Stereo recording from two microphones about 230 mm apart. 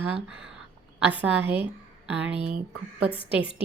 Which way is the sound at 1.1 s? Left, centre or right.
Left.